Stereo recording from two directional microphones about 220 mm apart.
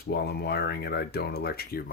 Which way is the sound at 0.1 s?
45° left (ahead or behind).